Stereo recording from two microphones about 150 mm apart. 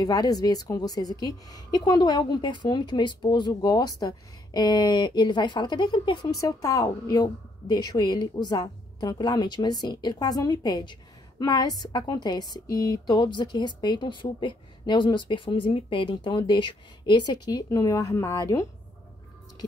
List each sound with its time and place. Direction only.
0.0 s speech: 25° left (ahead or behind)